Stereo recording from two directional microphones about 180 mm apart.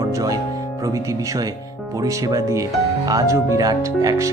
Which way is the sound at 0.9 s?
20° right (ahead or behind).